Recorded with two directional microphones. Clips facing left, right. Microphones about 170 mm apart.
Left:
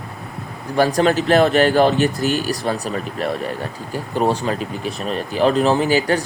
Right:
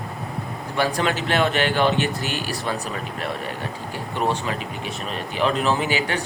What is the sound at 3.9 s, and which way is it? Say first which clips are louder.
Speech: left 5 dB; 35° left (ahead or behind).